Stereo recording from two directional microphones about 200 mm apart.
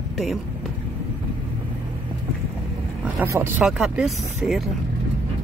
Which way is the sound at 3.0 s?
10° right (ahead or behind).